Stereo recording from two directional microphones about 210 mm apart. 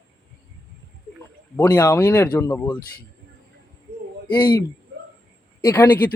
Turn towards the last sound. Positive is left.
turn(degrees=10)  # may be behind; listen again after turning